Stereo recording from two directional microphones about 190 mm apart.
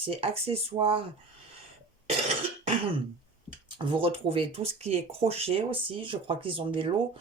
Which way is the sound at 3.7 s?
25° right (ahead or behind).